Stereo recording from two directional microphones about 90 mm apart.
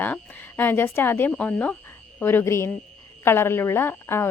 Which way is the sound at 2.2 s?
30° left (ahead or behind).